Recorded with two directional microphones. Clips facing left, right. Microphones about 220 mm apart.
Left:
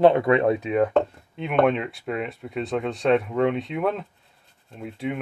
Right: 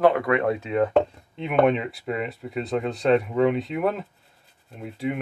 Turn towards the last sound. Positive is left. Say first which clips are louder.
# right 1 dB
turn(degrees=0)  # may be behind; listen again after turning